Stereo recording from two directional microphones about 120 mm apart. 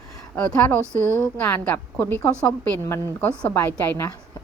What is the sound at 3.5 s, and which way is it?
Speech, 20° left (ahead or behind).